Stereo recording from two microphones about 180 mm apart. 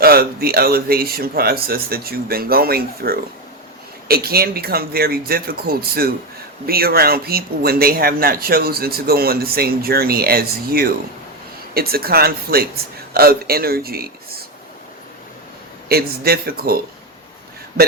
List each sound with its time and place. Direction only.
0.0 s speech: 60° right (ahead or behind)
15.9 s speech: 60° right (ahead or behind)